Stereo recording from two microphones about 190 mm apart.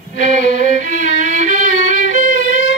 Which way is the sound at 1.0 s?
85° left.